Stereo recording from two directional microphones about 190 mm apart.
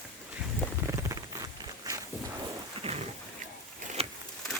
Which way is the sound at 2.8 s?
35° right (ahead or behind).